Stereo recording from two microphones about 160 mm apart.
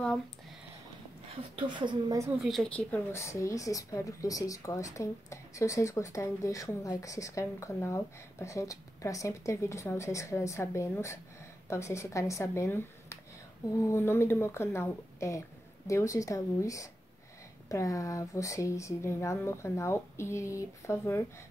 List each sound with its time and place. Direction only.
1.6 s a woman's voice: 30° right (ahead or behind)
2.3 s a woman's voice: centre (ahead or behind); by 21.2 s 15° left (ahead or behind)